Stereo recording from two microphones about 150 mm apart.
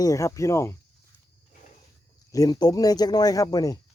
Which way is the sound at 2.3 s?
25° left (ahead or behind).